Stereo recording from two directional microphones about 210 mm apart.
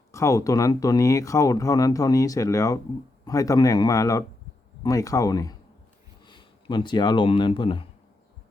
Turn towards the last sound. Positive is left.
turn(degrees=25)  # may be behind; listen again after turning